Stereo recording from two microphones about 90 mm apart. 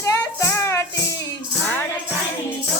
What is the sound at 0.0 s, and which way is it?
Music, 35° left (ahead or behind).